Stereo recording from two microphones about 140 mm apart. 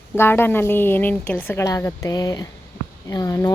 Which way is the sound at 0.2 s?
15° left (ahead or behind).